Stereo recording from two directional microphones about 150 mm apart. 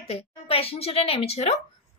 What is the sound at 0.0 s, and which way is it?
A woman's voice, 40° left (ahead or behind).